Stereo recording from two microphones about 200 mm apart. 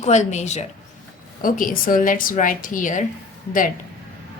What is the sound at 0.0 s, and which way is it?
A woman's voice, 35° left (ahead or behind).